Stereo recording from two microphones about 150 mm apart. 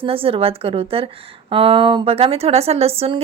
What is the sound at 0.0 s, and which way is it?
A woman's voice, 40° right (ahead or behind).